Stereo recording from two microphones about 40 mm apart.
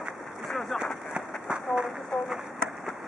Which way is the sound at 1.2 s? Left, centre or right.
Centre.